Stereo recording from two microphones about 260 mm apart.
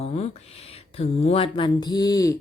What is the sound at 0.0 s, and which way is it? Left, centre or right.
A woman's voice, left.